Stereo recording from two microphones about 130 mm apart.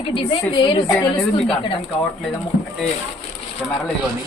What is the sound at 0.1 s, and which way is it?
Speech, 40° left (ahead or behind).